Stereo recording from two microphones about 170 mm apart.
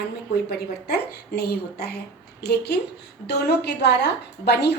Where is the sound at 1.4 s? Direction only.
70° left (ahead or behind).